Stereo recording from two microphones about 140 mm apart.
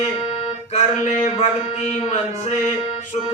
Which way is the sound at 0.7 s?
50° left (ahead or behind).